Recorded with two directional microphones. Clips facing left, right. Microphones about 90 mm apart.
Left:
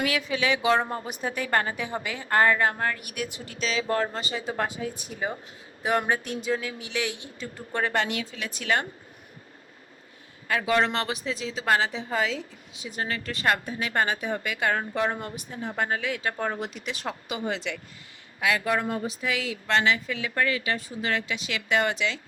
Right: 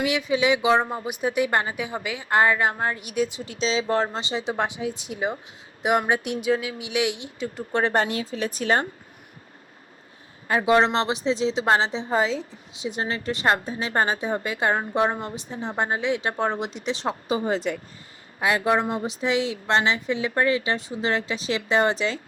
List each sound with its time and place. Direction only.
0.0 s a woman's voice: 20° right (ahead or behind)
7.9 s a woman's voice: 35° right (ahead or behind)
10.5 s a woman's voice: 30° right (ahead or behind)
18.3 s a woman's voice: 30° right (ahead or behind)